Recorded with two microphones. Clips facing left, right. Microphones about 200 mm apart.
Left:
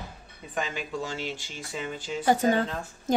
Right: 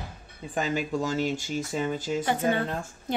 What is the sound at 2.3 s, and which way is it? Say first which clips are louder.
Speech: left 5 dB; 40° left (ahead or behind).